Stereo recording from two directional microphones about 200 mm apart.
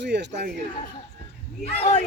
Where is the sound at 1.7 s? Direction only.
30° left (ahead or behind).